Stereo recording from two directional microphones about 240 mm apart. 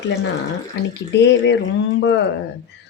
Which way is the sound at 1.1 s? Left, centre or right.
Left.